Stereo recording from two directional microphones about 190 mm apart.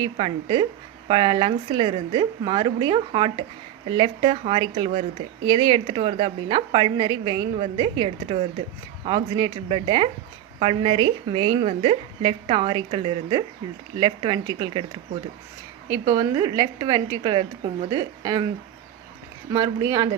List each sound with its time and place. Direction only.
0.0 s a woman's voice: 30° right (ahead or behind)
19.5 s a woman's voice: 20° right (ahead or behind)